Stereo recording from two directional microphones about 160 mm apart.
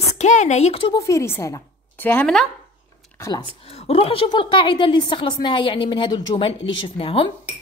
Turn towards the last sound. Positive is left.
turn(degrees=35)  # may be behind; listen again after turning